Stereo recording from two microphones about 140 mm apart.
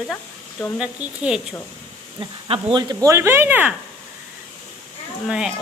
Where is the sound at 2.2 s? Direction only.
35° right (ahead or behind); by 3.7 s 15° right (ahead or behind).